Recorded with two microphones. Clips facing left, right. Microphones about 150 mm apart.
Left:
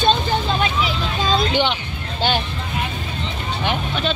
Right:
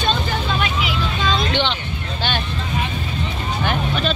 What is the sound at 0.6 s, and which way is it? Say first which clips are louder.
Vehicle: left 1 dB; 35° left (ahead or behind).